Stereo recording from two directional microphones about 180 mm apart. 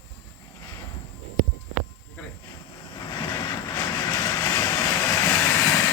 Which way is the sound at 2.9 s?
20° left (ahead or behind).